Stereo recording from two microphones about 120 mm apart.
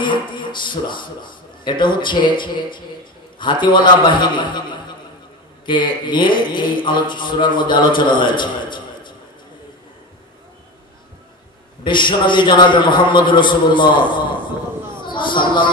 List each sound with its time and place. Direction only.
0.0 s speech: 40° left (ahead or behind)
11.8 s speech: 40° left (ahead or behind)
15.0 s a sound: 40° left (ahead or behind)